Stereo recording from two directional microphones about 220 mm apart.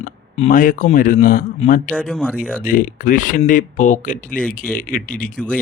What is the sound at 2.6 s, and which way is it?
Speech, 40° left (ahead or behind).